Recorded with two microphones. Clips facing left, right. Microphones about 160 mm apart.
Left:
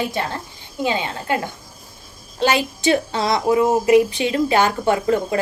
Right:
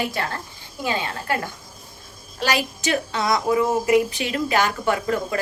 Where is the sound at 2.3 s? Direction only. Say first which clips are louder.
Left 5 dB; 25° left (ahead or behind).